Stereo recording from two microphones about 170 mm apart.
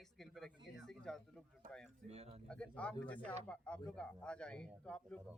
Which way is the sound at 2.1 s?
40° right (ahead or behind).